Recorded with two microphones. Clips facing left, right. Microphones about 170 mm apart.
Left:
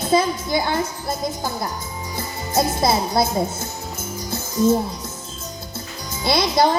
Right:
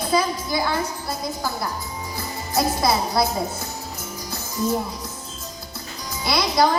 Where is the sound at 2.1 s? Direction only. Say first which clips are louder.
Left 3 dB; 25° left (ahead or behind).